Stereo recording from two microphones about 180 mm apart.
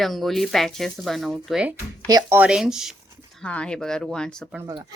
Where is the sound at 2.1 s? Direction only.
20° right (ahead or behind); by 4.5 s 5° left (ahead or behind).